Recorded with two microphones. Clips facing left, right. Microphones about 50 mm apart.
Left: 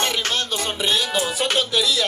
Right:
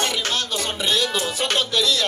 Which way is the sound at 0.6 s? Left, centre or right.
Centre.